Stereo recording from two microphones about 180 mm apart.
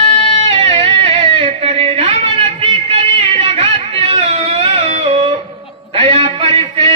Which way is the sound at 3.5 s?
30° right (ahead or behind).